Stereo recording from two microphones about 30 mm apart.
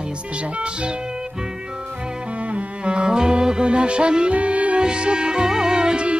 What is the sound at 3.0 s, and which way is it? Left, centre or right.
Music, right.